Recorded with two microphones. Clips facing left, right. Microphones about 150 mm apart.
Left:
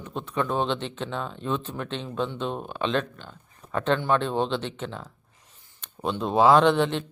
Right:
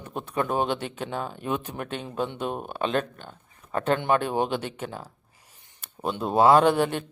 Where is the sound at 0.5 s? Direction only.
10° right (ahead or behind).